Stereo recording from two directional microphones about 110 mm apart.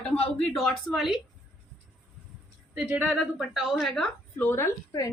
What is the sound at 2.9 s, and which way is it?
Speech, 10° right (ahead or behind).